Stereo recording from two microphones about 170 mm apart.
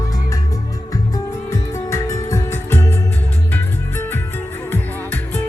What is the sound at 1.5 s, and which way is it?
Music, 15° left (ahead or behind).